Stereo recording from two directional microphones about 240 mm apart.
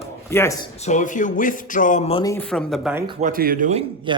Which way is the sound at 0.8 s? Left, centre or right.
Left.